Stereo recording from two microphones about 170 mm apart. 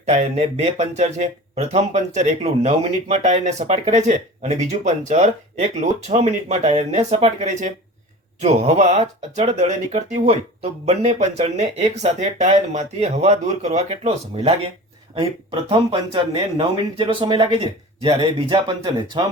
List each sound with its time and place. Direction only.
0.0 s speech: 40° right (ahead or behind)
15.7 s speech: 25° right (ahead or behind)